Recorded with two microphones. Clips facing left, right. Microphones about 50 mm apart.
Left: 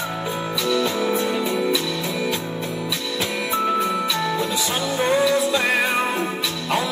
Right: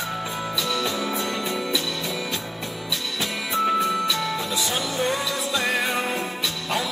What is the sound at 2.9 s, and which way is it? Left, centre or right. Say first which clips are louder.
Music: left 3 dB; left.